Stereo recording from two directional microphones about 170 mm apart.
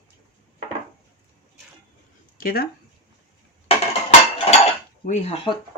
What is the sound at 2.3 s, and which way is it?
Speech, 60° left (ahead or behind).